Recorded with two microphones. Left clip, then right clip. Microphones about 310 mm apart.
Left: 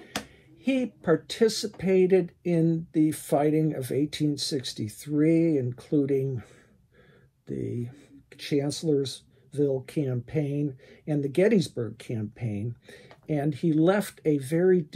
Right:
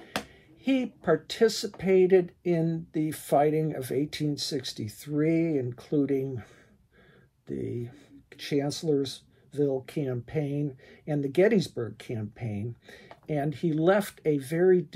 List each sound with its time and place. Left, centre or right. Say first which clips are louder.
0.7 s speech: left 1 dB; right